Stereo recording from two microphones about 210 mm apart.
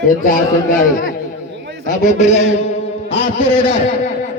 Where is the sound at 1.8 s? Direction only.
35° left (ahead or behind).